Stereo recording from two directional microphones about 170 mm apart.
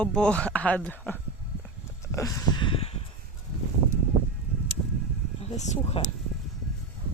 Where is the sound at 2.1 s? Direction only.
15° left (ahead or behind); by 3.0 s 35° left (ahead or behind).